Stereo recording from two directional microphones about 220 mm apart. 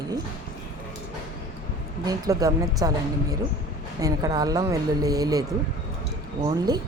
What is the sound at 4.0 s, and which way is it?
Speech, 15° right (ahead or behind).